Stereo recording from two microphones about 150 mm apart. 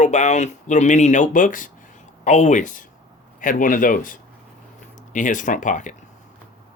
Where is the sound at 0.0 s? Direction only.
50° left (ahead or behind).